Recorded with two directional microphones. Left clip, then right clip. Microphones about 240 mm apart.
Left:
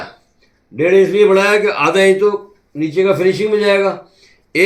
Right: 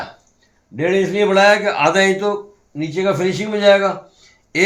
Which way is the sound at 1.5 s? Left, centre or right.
Right.